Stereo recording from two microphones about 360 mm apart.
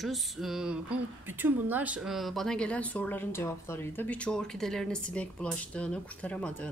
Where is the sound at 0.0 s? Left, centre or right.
Centre.